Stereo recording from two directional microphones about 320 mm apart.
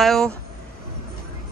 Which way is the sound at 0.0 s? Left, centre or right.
Centre.